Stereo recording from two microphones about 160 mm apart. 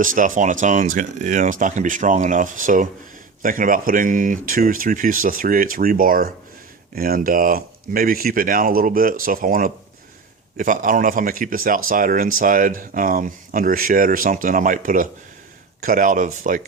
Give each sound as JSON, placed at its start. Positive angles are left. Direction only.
{"t": 0.0, "sound": "speech", "side_deg": -55}